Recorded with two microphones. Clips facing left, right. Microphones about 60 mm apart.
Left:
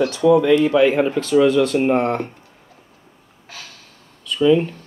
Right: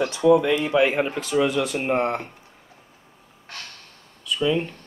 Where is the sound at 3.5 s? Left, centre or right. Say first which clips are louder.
Even; centre.